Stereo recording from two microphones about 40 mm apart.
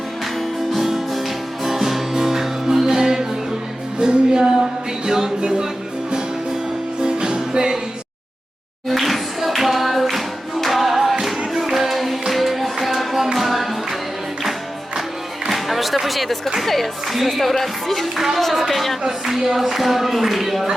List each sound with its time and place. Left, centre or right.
0.7 s music: centre
7.0 s music: centre
8.9 s singing: centre
12.3 s music: centre
15.4 s music: centre
18.3 s a sound: centre